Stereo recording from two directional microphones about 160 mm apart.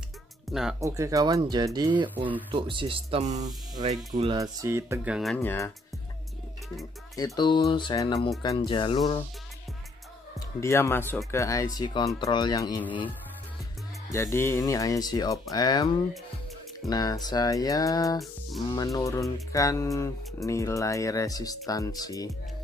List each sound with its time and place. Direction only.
0.5 s speech: 5° right (ahead or behind)
0.7 s speech: 20° right (ahead or behind); by 4.3 s 45° right (ahead or behind)
4.3 s speech: 20° right (ahead or behind)
5.1 s speech: centre (ahead or behind)
5.4 s speech: 15° left (ahead or behind)
7.2 s speech: 25° left (ahead or behind)
10.6 s speech: 15° left (ahead or behind)
14.1 s speech: 15° left (ahead or behind)
16.9 s speech: 25° left (ahead or behind)